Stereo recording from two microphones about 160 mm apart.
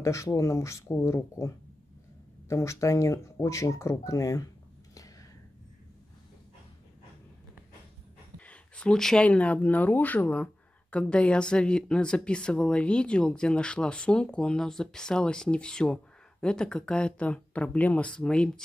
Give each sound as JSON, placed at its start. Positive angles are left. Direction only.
{"t": 0.0, "sound": "speech", "side_deg": 20}
{"t": 2.5, "sound": "speech", "side_deg": 20}
{"t": 8.4, "sound": "speech", "side_deg": 10}